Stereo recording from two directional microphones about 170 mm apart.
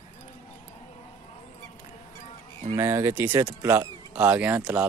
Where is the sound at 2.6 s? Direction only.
15° right (ahead or behind).